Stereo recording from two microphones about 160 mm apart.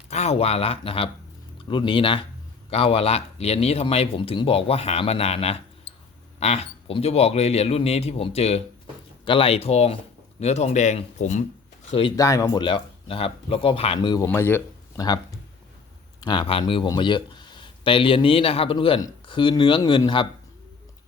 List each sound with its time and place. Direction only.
0.1 s speech: 45° left (ahead or behind)
11.9 s speech: 35° left (ahead or behind)
12.1 s speech: 20° left (ahead or behind)
14.3 s speech: 10° left (ahead or behind)
16.2 s a man's voice: 30° left (ahead or behind)